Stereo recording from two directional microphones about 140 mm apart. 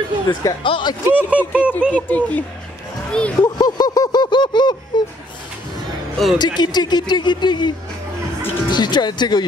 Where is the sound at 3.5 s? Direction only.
30° left (ahead or behind).